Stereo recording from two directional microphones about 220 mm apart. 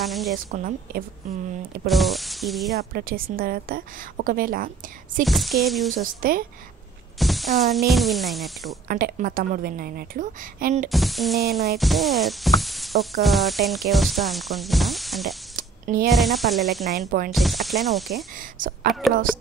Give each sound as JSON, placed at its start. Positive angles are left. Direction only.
{"t": 0.0, "sound": "speech", "side_deg": 0}
{"t": 0.5, "sound": "a woman's voice", "side_deg": -40}
{"t": 1.9, "sound": "speech", "side_deg": 0}
{"t": 2.7, "sound": "a woman's voice", "side_deg": -45}
{"t": 5.2, "sound": "speech", "side_deg": 0}
{"t": 6.2, "sound": "a woman's voice", "side_deg": -40}
{"t": 7.2, "sound": "speech", "side_deg": 0}
{"t": 8.8, "sound": "a woman's voice", "side_deg": -40}
{"t": 10.9, "sound": "speech", "side_deg": 0}
{"t": 11.8, "sound": "music", "side_deg": 0}
{"t": 13.2, "sound": "speech", "side_deg": 0}
{"t": 18.6, "sound": "a woman's voice", "side_deg": -40}
{"t": 18.9, "sound": "speech", "side_deg": 0}